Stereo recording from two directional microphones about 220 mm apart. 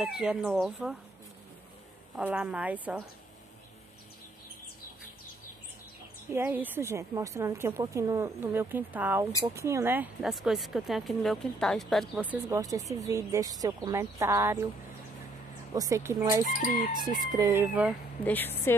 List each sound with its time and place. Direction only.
0.0 s speech: 5° right (ahead or behind)
2.1 s speech: 5° right (ahead or behind)
6.3 s speech: 10° right (ahead or behind)
15.7 s speech: 15° right (ahead or behind)
18.2 s a woman's voice: 10° left (ahead or behind)